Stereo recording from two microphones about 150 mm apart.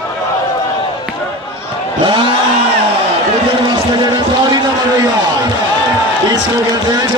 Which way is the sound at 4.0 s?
30° right (ahead or behind).